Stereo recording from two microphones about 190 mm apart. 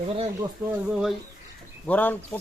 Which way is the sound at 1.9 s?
10° left (ahead or behind).